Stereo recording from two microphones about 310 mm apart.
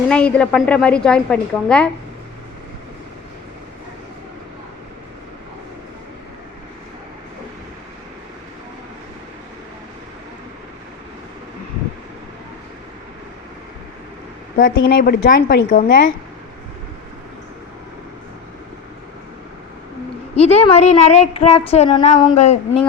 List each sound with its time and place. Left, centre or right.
0.1 s a woman's voice: centre
14.6 s a woman's voice: left
20.3 s speech: centre